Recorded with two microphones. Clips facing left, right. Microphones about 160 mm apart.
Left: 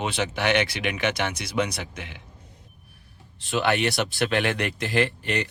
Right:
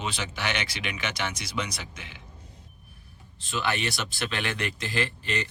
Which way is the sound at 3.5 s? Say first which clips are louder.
Left 6 dB; 60° left (ahead or behind).